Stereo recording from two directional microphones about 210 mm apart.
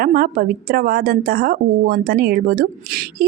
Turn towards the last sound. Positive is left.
turn(degrees=-45)  # may be behind; listen again after turning